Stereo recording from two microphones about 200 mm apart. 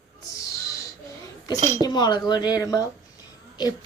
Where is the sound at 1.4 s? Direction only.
20° left (ahead or behind).